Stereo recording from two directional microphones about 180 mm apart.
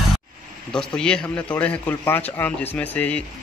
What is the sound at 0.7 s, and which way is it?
A man's voice, 5° left (ahead or behind).